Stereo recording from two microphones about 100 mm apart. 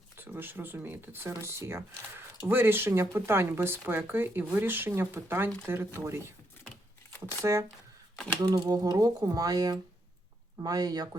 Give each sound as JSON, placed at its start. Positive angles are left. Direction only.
{"t": 0.2, "sound": "speech", "side_deg": -20}
{"t": 7.4, "sound": "speech", "side_deg": -30}
{"t": 8.4, "sound": "speech", "side_deg": -40}